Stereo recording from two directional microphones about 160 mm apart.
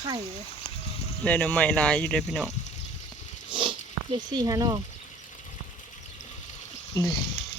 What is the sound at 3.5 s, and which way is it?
Sniff, 30° right (ahead or behind).